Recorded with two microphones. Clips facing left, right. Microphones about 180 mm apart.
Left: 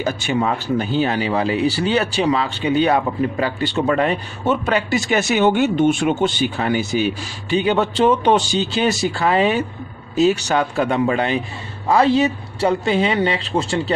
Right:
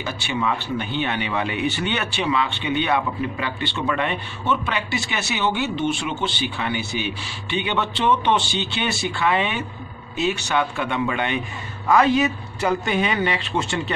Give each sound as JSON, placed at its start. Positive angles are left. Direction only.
{"t": 0.0, "sound": "speech", "side_deg": 40}